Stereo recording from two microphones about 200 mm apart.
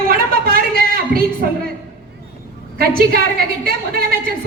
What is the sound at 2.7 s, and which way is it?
Speech, 50° right (ahead or behind).